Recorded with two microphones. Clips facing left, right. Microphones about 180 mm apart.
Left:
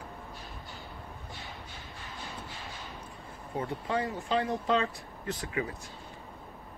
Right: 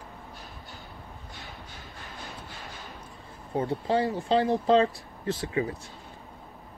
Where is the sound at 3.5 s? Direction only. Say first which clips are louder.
Right 6 dB; 30° right (ahead or behind).